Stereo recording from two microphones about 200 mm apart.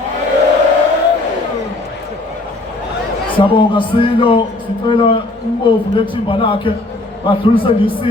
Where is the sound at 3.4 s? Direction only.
25° left (ahead or behind).